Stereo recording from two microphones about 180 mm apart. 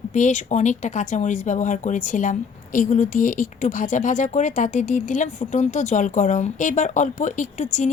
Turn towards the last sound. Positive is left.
turn(degrees=45)  # may be behind; listen again after turning